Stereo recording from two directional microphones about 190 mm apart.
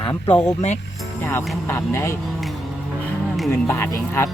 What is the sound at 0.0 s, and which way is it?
Speech, 25° left (ahead or behind).